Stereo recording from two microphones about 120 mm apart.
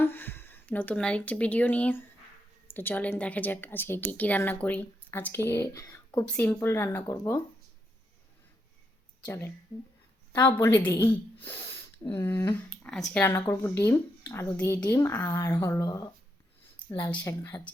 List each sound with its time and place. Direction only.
0.0 s a woman's voice: 20° left (ahead or behind)
9.2 s speech: 20° left (ahead or behind)
12.7 s speech: 5° left (ahead or behind)
15.8 s speech: 30° left (ahead or behind)
17.2 s speech: 25° left (ahead or behind)